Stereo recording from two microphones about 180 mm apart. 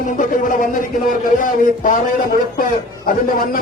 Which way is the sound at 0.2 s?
45° left (ahead or behind).